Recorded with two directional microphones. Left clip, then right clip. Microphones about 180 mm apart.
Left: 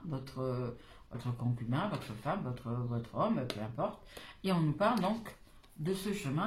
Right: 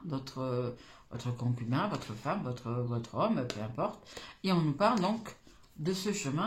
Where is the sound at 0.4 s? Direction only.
40° right (ahead or behind).